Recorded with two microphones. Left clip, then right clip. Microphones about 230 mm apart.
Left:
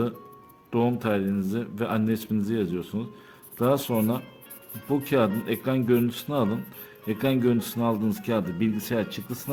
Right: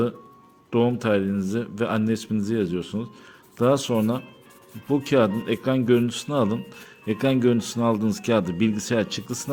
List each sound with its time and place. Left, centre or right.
0.7 s speech: centre